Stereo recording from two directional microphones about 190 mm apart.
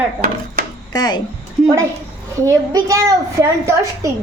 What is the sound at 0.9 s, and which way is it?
Speech, 20° left (ahead or behind).